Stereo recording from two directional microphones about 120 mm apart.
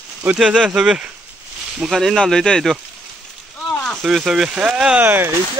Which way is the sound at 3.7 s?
5° left (ahead or behind).